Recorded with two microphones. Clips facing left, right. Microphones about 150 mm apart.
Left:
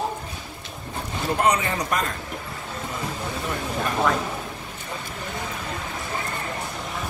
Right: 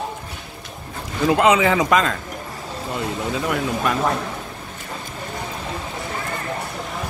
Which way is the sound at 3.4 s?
90° right.